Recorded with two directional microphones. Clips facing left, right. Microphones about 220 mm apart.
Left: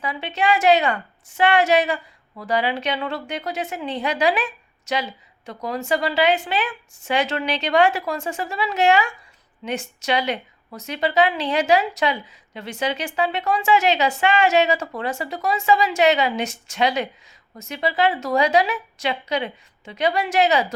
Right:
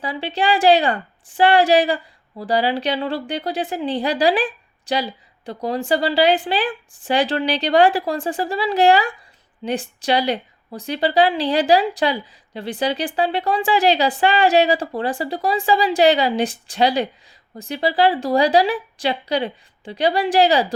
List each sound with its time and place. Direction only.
0.0 s a woman's voice: 30° right (ahead or behind)